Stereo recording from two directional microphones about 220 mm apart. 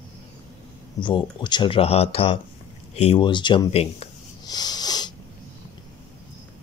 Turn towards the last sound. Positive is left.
turn(degrees=20)  # may be behind; listen again after turning